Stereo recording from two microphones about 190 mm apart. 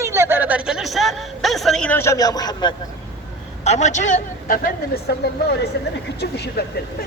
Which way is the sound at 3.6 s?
40° left (ahead or behind).